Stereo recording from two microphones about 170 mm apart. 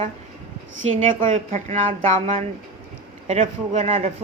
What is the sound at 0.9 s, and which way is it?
A woman's voice, 45° right (ahead or behind).